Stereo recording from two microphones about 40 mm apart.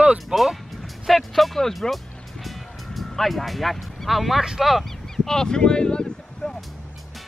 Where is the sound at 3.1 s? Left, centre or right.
Centre.